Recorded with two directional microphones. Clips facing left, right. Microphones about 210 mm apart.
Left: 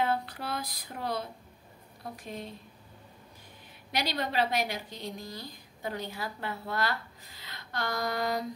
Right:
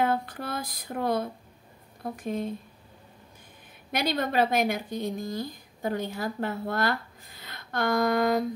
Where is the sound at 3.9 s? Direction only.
50° right (ahead or behind).